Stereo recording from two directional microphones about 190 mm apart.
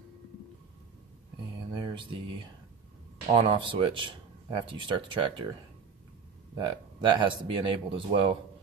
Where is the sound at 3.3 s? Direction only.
30° right (ahead or behind).